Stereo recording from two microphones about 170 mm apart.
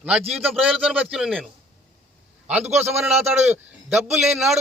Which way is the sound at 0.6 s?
5° right (ahead or behind).